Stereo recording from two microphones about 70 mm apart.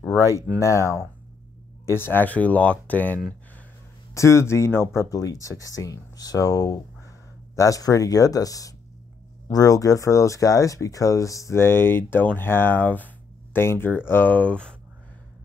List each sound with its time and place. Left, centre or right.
0.6 s speech: left
2.0 s speech: left
4.1 s speech: left
5.1 s speech: left
11.6 s speech: left; by 14.8 s centre